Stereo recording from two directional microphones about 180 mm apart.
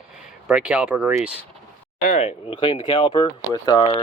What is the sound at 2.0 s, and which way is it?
Speech, 40° left (ahead or behind).